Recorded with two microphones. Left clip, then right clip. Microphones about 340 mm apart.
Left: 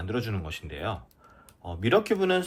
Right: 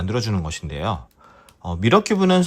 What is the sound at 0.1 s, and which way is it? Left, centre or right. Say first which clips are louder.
Speech: right 6 dB; centre.